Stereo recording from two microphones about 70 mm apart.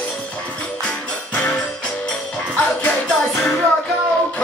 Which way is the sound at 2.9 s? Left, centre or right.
Centre.